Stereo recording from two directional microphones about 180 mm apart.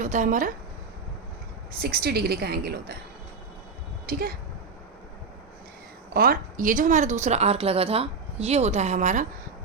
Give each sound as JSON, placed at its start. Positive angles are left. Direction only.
{"t": 0.0, "sound": "speech", "side_deg": -40}
{"t": 1.8, "sound": "a woman's voice", "side_deg": -60}
{"t": 4.1, "sound": "a woman's voice", "side_deg": -55}
{"t": 6.1, "sound": "speech", "side_deg": -50}